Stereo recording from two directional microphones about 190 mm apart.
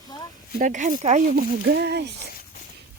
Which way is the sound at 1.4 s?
60° right (ahead or behind).